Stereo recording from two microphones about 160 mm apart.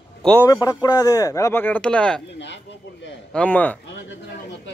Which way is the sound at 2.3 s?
90° left.